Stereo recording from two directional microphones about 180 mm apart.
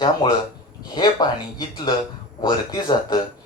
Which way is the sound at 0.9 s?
25° left (ahead or behind).